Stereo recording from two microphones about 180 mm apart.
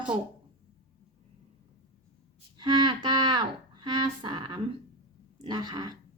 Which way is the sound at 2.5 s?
25° right (ahead or behind).